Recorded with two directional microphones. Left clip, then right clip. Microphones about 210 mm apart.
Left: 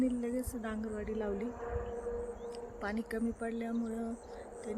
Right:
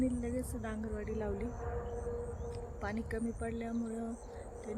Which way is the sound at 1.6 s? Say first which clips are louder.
Left 2 dB; 45° left (ahead or behind).